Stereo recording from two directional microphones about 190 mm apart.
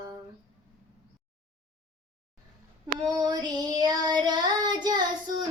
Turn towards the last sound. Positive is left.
turn(degrees=-20)  # may be behind; listen again after turning